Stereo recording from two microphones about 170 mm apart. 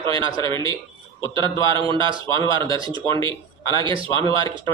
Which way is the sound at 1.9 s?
30° right (ahead or behind).